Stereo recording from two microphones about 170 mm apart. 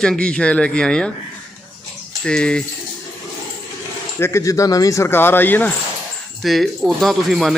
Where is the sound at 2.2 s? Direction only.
5° left (ahead or behind).